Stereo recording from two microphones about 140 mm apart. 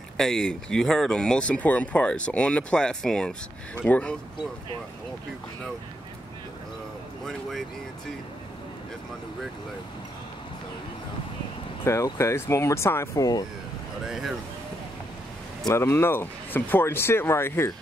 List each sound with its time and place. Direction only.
0.2 s speech: 5° left (ahead or behind)
11.8 s speech: 20° left (ahead or behind)
14.0 s speech: centre (ahead or behind)
15.6 s speech: 20° left (ahead or behind)